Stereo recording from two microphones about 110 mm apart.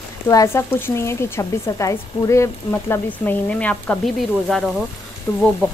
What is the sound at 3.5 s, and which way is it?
Speech, 10° left (ahead or behind).